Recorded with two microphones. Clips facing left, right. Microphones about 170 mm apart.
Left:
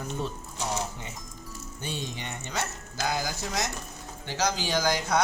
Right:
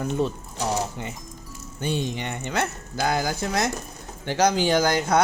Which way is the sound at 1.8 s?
60° right (ahead or behind).